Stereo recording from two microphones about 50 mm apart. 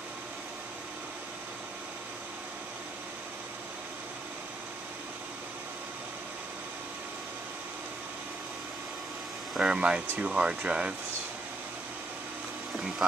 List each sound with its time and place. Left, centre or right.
9.6 s speech: centre